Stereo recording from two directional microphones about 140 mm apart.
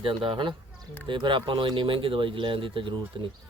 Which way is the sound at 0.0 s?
40° right (ahead or behind).